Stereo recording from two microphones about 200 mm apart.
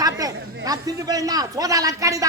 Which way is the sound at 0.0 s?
20° right (ahead or behind).